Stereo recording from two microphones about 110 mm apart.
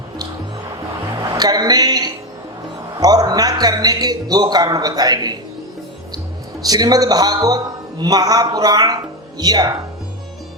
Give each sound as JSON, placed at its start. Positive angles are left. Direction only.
{"t": 1.2, "sound": "a sound", "side_deg": -35}
{"t": 3.0, "sound": "a man's voice", "side_deg": -35}
{"t": 6.6, "sound": "a man's voice", "side_deg": -35}